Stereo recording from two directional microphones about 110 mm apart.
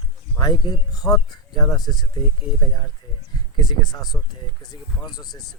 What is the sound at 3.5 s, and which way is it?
Speech, 40° left (ahead or behind).